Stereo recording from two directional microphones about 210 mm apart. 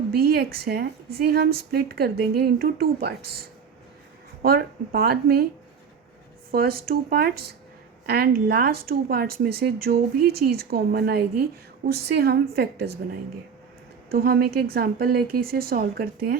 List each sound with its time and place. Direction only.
0.1 s speech: 45° right (ahead or behind)
4.4 s speech: 45° right (ahead or behind)
6.5 s speech: 45° right (ahead or behind)
14.1 s speech: 45° right (ahead or behind)